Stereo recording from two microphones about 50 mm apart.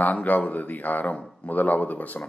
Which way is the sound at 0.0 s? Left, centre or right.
Left.